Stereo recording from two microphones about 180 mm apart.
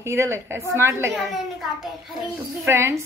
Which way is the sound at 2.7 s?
15° right (ahead or behind).